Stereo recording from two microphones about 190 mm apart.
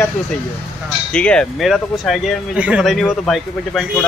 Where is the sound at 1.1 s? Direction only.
5° left (ahead or behind).